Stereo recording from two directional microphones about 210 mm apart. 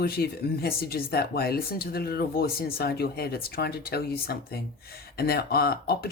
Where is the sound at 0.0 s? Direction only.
45° left (ahead or behind).